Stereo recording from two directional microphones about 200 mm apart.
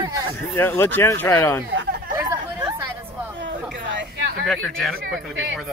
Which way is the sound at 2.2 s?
20° right (ahead or behind).